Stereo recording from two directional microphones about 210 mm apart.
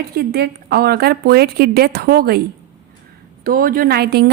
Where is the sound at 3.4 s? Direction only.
45° right (ahead or behind).